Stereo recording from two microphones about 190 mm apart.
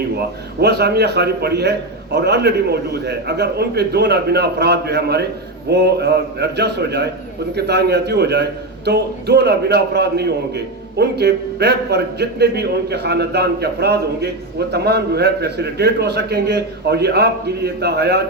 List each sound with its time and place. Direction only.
0.6 s a man's voice: 60° right (ahead or behind)